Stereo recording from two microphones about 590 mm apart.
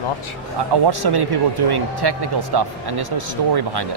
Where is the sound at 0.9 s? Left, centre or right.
Right.